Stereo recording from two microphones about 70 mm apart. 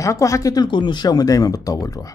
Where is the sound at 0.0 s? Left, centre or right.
Left.